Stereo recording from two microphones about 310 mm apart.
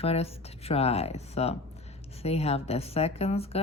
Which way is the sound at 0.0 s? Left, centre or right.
Centre.